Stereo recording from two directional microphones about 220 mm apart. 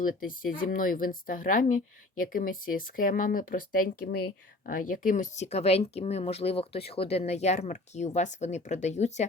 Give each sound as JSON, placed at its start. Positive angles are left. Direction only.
{"t": 0.0, "sound": "a woman's voice", "side_deg": 40}